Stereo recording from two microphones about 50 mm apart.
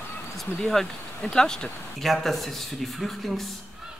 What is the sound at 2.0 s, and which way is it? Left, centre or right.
Speech, centre.